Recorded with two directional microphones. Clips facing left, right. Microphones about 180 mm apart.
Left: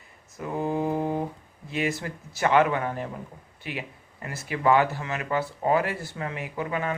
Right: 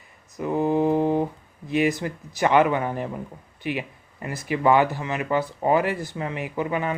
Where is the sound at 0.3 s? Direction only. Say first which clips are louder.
Right 6 dB; 20° right (ahead or behind).